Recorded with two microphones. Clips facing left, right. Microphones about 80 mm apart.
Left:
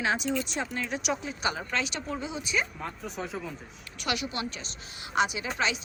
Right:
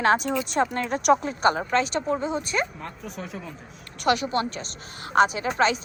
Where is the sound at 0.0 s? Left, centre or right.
Right.